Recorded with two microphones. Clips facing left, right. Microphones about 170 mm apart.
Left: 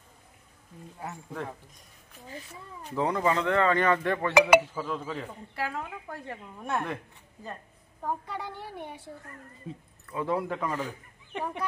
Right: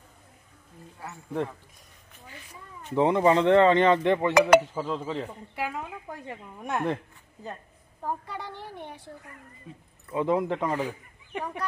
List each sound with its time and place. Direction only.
2.2 s a woman's voice: 35° left (ahead or behind)
3.0 s speech: 25° right (ahead or behind)
4.3 s speech: 10° left (ahead or behind)
4.7 s speech: 20° right (ahead or behind)
8.0 s a woman's voice: centre (ahead or behind)
10.1 s speech: 20° right (ahead or behind)